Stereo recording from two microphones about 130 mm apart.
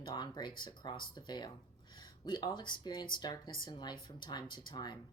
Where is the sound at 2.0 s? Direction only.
35° left (ahead or behind).